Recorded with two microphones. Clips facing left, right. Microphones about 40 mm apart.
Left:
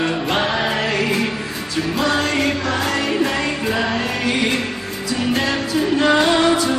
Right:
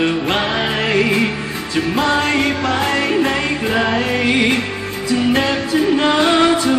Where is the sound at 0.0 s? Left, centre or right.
Right.